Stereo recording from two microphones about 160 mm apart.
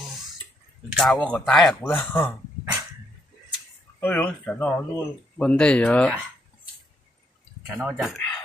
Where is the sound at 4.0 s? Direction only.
10° left (ahead or behind).